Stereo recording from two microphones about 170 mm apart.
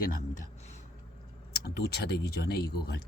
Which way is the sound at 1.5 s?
70° left (ahead or behind).